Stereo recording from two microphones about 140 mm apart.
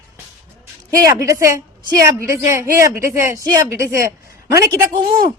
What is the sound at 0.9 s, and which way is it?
Speech, 20° right (ahead or behind).